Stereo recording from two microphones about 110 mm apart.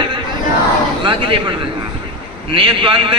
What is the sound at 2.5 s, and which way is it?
Speech, 50° right (ahead or behind).